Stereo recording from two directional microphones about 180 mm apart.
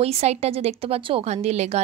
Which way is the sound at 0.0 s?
35° right (ahead or behind).